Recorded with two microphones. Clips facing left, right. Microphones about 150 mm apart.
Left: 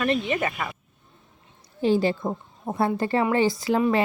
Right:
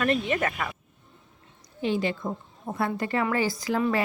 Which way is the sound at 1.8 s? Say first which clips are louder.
Left 5 dB; 35° left (ahead or behind).